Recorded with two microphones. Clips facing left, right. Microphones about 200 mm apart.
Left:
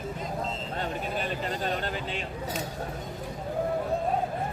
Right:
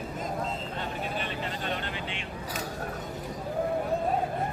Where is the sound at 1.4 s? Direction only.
40° left (ahead or behind).